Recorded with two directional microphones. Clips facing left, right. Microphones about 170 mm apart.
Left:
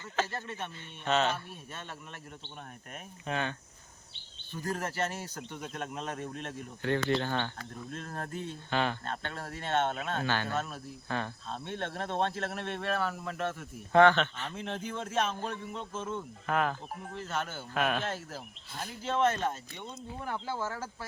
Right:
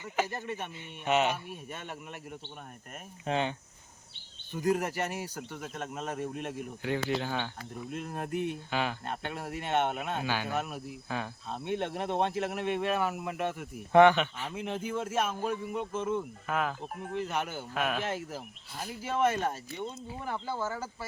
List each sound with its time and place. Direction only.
0.0 s speech: 15° right (ahead or behind)
3.2 s speech: 20° right (ahead or behind)
4.5 s speech: 15° right (ahead or behind)
17.7 s speech: 5° right (ahead or behind)
18.0 s speech: 15° right (ahead or behind)